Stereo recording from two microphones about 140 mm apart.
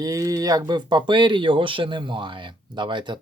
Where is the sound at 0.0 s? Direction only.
25° right (ahead or behind).